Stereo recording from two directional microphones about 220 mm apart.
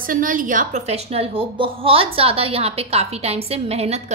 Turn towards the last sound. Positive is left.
turn(degrees=-30)  # may be behind; listen again after turning